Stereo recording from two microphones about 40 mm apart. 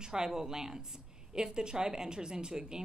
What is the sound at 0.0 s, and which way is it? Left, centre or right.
Speech, centre.